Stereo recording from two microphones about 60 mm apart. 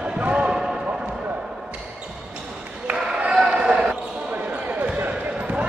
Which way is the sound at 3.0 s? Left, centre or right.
Centre.